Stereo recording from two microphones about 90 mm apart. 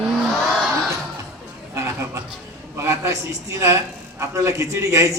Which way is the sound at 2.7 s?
35° right (ahead or behind).